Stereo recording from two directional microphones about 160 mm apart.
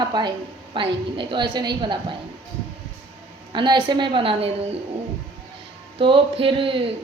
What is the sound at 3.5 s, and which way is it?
Speech, 30° right (ahead or behind).